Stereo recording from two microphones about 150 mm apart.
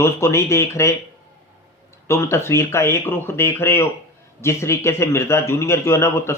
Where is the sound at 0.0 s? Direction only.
20° left (ahead or behind).